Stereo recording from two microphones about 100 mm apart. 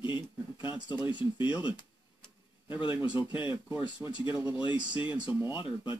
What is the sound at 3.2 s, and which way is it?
Speech, 50° left (ahead or behind).